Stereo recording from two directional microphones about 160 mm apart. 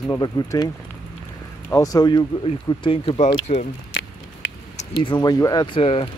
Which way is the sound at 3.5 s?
50° left (ahead or behind).